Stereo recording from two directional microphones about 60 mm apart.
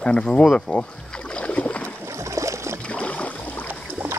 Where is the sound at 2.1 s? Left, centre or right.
Right.